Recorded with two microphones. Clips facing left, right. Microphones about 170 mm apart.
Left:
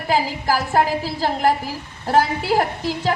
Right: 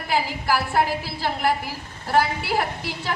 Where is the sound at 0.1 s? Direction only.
40° left (ahead or behind).